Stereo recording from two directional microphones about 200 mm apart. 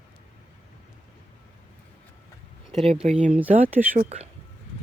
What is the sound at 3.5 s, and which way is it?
Speech, 35° right (ahead or behind).